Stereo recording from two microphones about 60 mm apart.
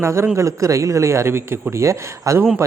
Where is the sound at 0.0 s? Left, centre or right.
Right.